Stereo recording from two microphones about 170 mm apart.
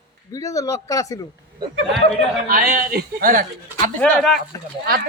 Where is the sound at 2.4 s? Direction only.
55° right (ahead or behind).